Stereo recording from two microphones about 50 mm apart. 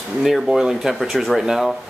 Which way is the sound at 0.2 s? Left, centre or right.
Centre.